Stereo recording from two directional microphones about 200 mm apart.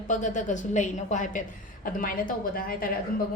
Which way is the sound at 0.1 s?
40° left (ahead or behind).